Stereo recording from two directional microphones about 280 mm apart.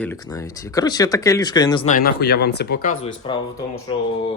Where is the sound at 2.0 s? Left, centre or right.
Left.